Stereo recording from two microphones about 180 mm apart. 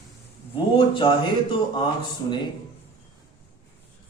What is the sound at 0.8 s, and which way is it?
A man's voice, 25° left (ahead or behind).